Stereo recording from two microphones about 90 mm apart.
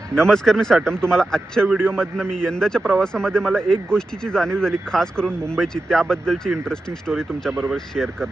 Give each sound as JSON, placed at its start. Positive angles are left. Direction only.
{"t": 0.2, "sound": "speech", "side_deg": 5}
{"t": 7.5, "sound": "speech", "side_deg": -20}
{"t": 7.9, "sound": "speech", "side_deg": 5}